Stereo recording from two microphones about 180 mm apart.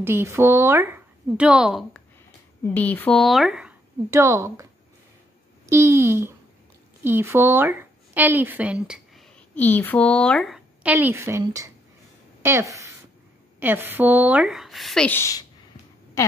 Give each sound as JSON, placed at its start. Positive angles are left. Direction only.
{"t": 0.0, "sound": "a woman's voice", "side_deg": -15}
{"t": 4.1, "sound": "speech", "side_deg": -15}
{"t": 5.7, "sound": "a woman's voice", "side_deg": -15}
{"t": 9.6, "sound": "a woman's voice", "side_deg": 10}